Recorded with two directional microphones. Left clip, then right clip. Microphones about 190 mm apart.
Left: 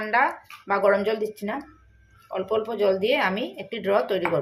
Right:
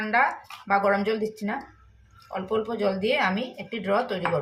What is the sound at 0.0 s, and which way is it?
Speech, 30° left (ahead or behind).